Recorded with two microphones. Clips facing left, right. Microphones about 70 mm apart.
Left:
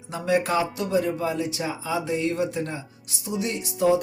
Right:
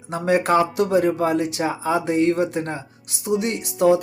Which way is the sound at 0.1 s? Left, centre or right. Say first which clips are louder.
Right 5 dB; right.